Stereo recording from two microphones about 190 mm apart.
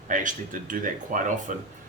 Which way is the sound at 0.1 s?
45° right (ahead or behind).